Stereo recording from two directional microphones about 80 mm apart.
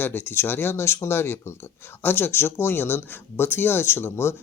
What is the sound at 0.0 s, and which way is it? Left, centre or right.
Speech, left.